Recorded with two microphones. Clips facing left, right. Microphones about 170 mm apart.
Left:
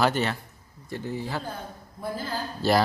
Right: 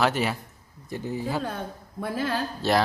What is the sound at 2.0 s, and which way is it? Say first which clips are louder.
Speech: right 4 dB; 75° right (ahead or behind).